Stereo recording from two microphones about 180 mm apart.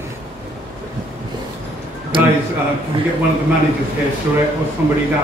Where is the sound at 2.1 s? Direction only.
25° right (ahead or behind).